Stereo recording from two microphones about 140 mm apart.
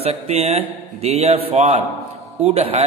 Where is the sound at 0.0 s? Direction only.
50° right (ahead or behind).